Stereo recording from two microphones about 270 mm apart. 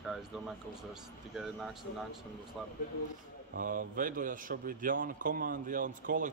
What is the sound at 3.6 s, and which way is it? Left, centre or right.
A man's voice, right.